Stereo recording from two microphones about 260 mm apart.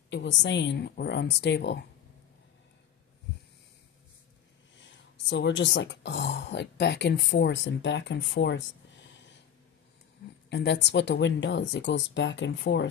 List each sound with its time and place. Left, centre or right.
0.1 s speech: left
5.1 s speech: left
10.5 s speech: left